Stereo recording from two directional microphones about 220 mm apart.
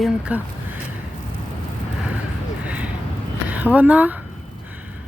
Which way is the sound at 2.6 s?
5° right (ahead or behind).